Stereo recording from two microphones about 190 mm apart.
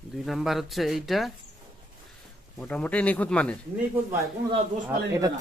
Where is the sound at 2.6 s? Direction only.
5° left (ahead or behind).